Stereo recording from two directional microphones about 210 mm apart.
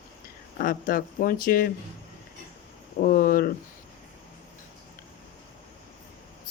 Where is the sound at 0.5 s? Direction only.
40° left (ahead or behind).